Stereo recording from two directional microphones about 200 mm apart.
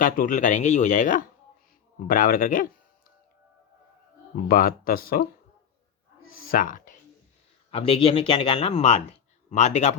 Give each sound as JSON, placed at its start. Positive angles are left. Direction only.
{"t": 0.0, "sound": "speech", "side_deg": 40}
{"t": 4.4, "sound": "speech", "side_deg": 45}
{"t": 6.3, "sound": "a sound", "side_deg": 45}
{"t": 7.7, "sound": "speech", "side_deg": 30}